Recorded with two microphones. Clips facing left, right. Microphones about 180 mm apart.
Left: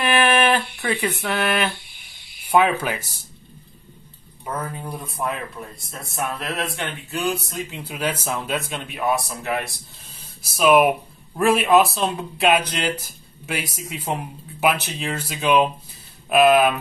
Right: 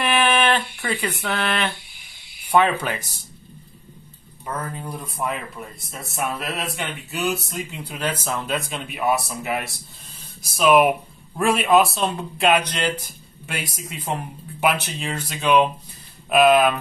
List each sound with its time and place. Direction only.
0.0 s a sound: 5° left (ahead or behind)
2.4 s speech: 5° left (ahead or behind)
4.5 s speech: 5° left (ahead or behind)
6.4 s speech: centre (ahead or behind)